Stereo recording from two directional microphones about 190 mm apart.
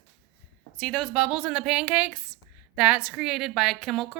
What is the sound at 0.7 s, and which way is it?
A woman's voice, 5° left (ahead or behind).